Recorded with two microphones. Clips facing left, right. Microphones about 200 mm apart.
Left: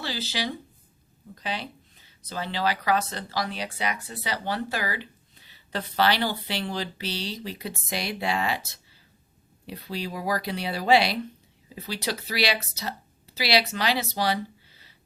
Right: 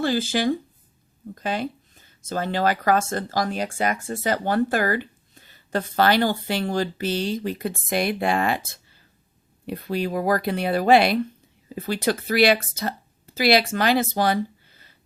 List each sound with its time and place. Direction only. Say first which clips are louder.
0.0 s speech: right 10 dB; 50° right (ahead or behind)